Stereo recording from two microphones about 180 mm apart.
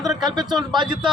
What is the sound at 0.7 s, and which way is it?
Speech, 25° right (ahead or behind).